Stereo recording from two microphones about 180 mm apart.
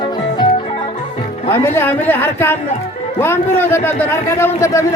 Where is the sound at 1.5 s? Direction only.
15° left (ahead or behind).